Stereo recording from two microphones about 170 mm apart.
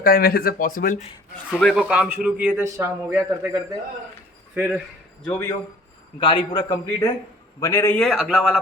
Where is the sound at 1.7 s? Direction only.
5° right (ahead or behind).